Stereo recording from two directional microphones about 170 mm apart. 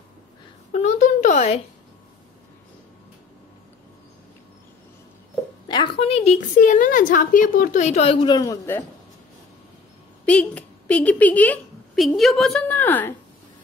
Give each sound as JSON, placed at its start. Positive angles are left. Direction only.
{"t": 0.7, "sound": "a sound", "side_deg": 45}
{"t": 5.7, "sound": "speech", "side_deg": 30}
{"t": 6.5, "sound": "a woman's voice", "side_deg": 50}
{"t": 8.3, "sound": "a man's voice", "side_deg": 20}
{"t": 10.2, "sound": "a woman's voice", "side_deg": 10}